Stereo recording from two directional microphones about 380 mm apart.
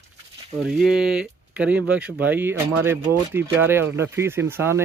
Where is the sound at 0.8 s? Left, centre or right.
Centre.